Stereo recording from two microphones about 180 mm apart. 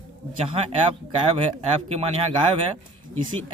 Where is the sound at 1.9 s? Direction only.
35° right (ahead or behind).